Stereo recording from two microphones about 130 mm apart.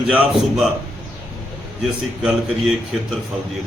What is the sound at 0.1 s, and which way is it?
Speech, 5° right (ahead or behind).